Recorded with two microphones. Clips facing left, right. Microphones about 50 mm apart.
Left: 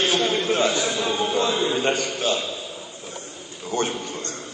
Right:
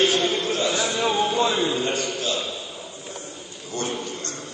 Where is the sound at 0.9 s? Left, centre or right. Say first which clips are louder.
Right 1 dB; right.